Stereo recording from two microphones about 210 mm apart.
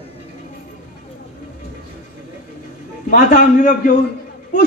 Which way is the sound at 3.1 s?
40° left (ahead or behind).